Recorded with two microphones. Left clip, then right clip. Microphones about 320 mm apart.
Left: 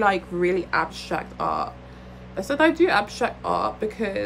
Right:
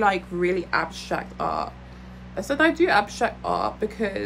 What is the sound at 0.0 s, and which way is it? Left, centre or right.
A woman's voice, centre.